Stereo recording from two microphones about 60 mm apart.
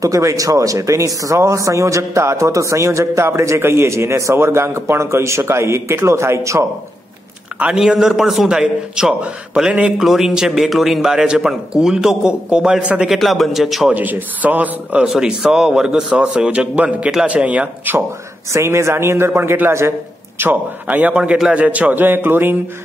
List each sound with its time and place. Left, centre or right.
0.0 s speech: right
7.7 s a man's voice: centre
13.1 s speech: centre
13.9 s a man's voice: right
15.0 s a man's voice: centre
18.5 s a man's voice: right
20.3 s a man's voice: right
21.2 s a man's voice: centre; by 22.6 s right